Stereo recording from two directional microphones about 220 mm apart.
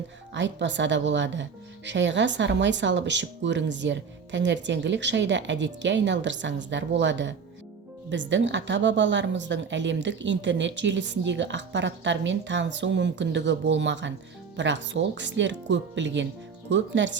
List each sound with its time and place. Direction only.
0.3 s speech: 55° right (ahead or behind)